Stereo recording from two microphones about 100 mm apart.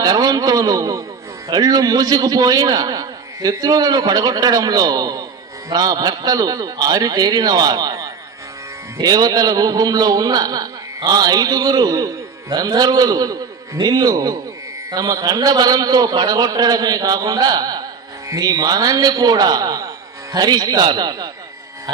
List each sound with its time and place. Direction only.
0.0 s a man's voice: 40° right (ahead or behind)